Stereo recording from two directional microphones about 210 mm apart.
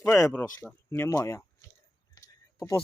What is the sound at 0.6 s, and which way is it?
Speech, 10° left (ahead or behind).